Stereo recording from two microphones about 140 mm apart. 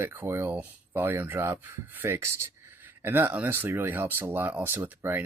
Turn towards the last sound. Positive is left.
turn(degrees=-15)  # may be behind; listen again after turning